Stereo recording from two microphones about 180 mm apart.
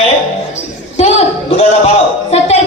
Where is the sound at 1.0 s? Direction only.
35° left (ahead or behind).